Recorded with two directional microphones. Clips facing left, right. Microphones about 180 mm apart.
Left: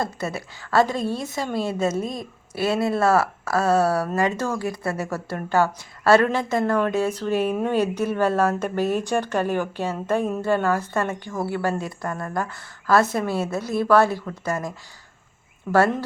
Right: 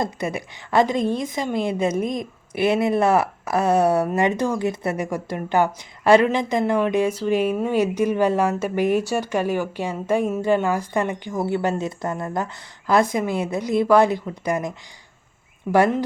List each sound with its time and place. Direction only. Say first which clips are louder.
0.0 s a woman's voice: right 2 dB; 15° right (ahead or behind)
15.7 s a woman's voice: right 1 dB; 15° right (ahead or behind)